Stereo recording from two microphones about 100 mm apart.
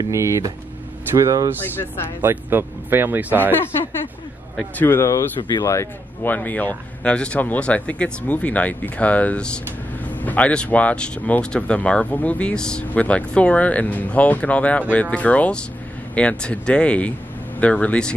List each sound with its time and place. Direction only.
0.1 s speech: 30° right (ahead or behind)
2.2 s speech: 20° right (ahead or behind)
4.7 s speech: 20° left (ahead or behind)
6.2 s speech: 15° left (ahead or behind)